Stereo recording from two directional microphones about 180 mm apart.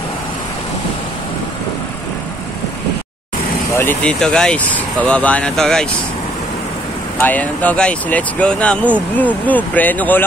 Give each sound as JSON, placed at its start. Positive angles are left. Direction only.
{"t": 3.7, "sound": "speech", "side_deg": 10}
{"t": 7.2, "sound": "speech", "side_deg": 10}